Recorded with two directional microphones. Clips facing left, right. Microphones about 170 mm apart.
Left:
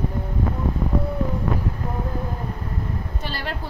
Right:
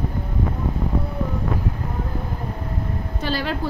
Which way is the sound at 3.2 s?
90° right.